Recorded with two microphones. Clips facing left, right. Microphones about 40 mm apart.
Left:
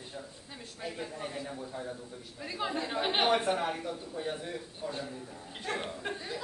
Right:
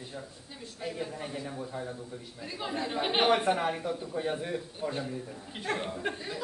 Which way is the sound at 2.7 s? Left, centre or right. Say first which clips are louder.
Right 3 dB; centre.